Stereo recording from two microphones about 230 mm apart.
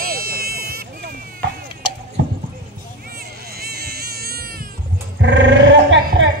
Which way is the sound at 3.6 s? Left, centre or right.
Right.